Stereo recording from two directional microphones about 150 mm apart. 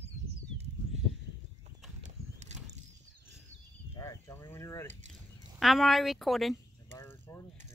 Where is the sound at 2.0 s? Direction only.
50° right (ahead or behind).